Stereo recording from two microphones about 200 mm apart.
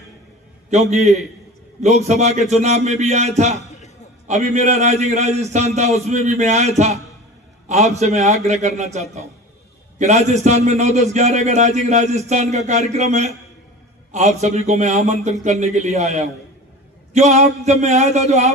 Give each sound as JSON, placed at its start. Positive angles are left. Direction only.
{"t": 0.7, "sound": "a man's voice", "side_deg": -35}